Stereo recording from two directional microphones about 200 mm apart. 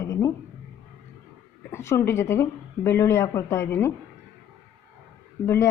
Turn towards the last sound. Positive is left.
turn(degrees=15)  # may be behind; listen again after turning